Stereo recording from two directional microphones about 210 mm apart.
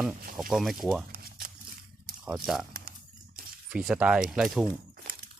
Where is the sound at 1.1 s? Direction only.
45° right (ahead or behind).